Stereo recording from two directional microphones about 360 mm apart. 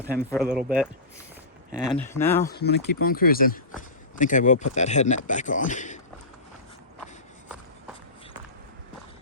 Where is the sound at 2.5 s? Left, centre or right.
Left.